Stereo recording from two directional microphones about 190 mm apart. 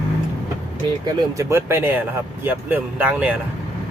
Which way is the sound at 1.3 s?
15° right (ahead or behind).